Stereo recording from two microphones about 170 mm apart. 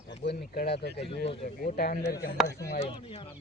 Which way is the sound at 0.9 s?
35° left (ahead or behind).